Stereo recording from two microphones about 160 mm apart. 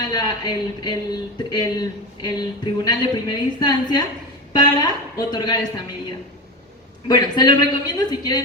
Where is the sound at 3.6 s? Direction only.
25° left (ahead or behind).